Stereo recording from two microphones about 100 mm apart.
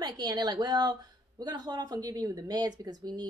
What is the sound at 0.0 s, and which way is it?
A woman's voice, 45° right (ahead or behind).